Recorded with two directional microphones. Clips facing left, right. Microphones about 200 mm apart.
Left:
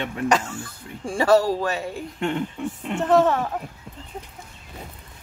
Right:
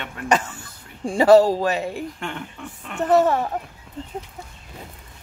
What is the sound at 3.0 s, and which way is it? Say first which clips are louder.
Speech: right 1 dB; 10° right (ahead or behind).